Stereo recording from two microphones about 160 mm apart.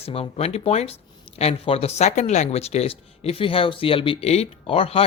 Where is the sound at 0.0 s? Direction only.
40° left (ahead or behind).